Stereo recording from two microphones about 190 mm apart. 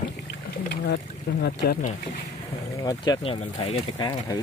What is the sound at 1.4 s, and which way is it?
Speech, 55° left (ahead or behind).